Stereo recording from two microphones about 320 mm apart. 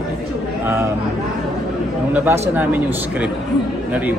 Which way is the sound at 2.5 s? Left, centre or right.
Centre.